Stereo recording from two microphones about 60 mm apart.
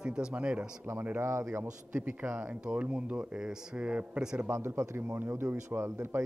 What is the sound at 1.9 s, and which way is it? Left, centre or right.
Speech, right.